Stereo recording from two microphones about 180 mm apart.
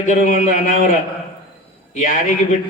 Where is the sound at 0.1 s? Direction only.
45° left (ahead or behind).